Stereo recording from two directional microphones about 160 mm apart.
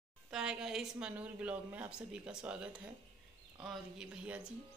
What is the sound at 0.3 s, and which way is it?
A woman's voice, 5° right (ahead or behind).